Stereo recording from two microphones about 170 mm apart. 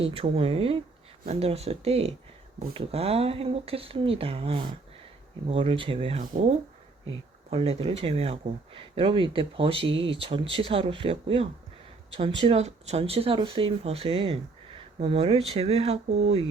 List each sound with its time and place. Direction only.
0.2 s speech: 35° right (ahead or behind)